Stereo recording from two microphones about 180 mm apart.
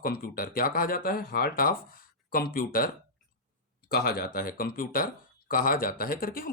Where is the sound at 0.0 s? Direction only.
55° left (ahead or behind).